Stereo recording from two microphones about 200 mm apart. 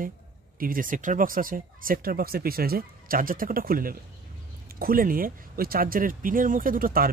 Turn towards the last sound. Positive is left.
turn(degrees=-45)  # may be behind; listen again after turning